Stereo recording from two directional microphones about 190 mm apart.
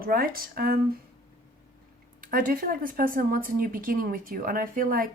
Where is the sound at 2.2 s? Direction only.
45° right (ahead or behind).